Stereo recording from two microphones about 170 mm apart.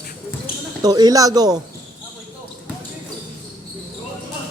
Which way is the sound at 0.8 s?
25° right (ahead or behind).